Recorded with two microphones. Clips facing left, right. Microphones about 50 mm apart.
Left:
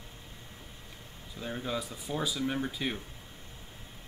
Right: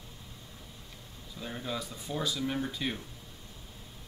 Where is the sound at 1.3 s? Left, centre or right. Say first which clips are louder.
Left 2 dB; centre.